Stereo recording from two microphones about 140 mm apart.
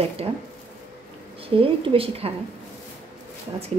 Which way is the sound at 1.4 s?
40° right (ahead or behind).